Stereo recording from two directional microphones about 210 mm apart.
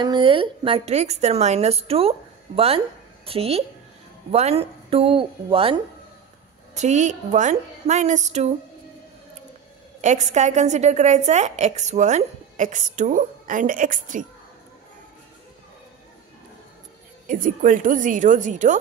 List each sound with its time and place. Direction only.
0.0 s a woman's voice: 20° right (ahead or behind)
10.0 s a woman's voice: 35° right (ahead or behind)
17.3 s a woman's voice: 40° right (ahead or behind)